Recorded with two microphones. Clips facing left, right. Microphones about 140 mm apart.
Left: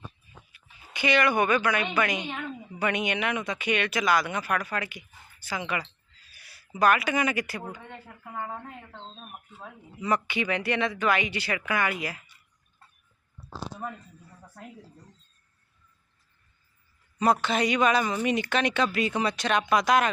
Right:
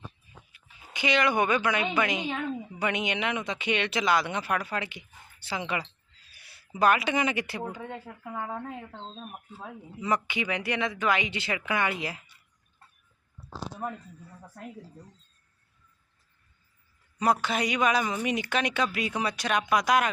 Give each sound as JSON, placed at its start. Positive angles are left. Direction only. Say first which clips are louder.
{"t": 0.9, "sound": "speech", "louder": "left 1 dB", "side_deg": -20}
{"t": 10.0, "sound": "speech", "louder": "left 1 dB", "side_deg": -15}
{"t": 17.2, "sound": "speech", "louder": "left 2 dB", "side_deg": -10}